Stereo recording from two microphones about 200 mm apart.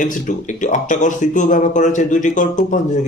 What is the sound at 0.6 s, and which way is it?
Speech, 40° left (ahead or behind).